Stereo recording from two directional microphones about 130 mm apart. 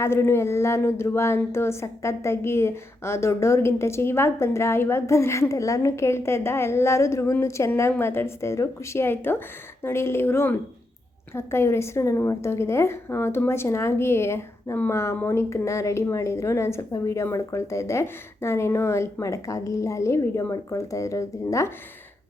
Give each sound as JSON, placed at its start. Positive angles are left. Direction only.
{"t": 0.0, "sound": "a woman's voice", "side_deg": 20}